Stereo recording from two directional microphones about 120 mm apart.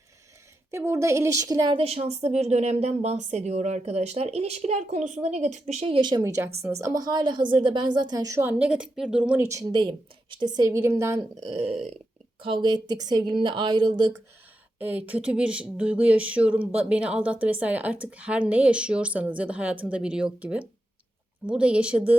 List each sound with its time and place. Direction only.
0.7 s a woman's voice: 25° right (ahead or behind)
1.7 s speech: 50° right (ahead or behind)
6.0 s a woman's voice: 35° right (ahead or behind)
6.3 s a woman's voice: 20° right (ahead or behind)
8.4 s speech: 15° right (ahead or behind)
9.5 s a woman's voice: 30° right (ahead or behind)
10.7 s a woman's voice: 20° right (ahead or behind)
11.5 s speech: 60° right (ahead or behind)
13.0 s a woman's voice: 35° right (ahead or behind)
14.8 s speech: 15° right (ahead or behind)